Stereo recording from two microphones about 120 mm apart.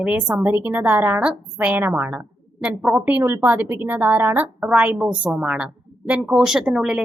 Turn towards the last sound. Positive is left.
turn(degrees=-5)  # may be behind; listen again after turning